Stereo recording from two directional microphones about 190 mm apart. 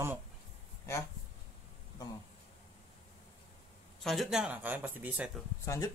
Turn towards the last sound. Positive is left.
turn(degrees=15)  # may be behind; listen again after turning